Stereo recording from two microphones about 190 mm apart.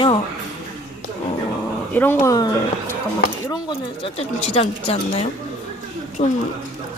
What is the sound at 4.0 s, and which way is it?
Speech, 30° left (ahead or behind).